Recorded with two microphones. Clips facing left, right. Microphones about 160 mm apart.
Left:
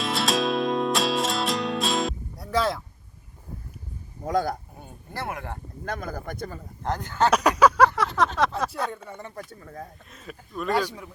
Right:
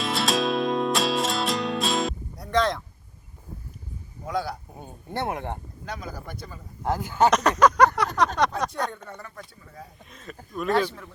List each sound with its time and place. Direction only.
0.0 s music: centre (ahead or behind)
4.3 s speech: 45° left (ahead or behind)
5.1 s speech: 20° right (ahead or behind)
5.8 s speech: 50° left (ahead or behind)
6.8 s speech: 10° right (ahead or behind)
7.3 s speech: 10° left (ahead or behind)
7.9 s a sound: centre (ahead or behind)
8.4 s speech: 5° left (ahead or behind)
9.3 s speech: 50° left (ahead or behind)
10.1 s a sound: 5° left (ahead or behind)
10.7 s speech: 10° left (ahead or behind)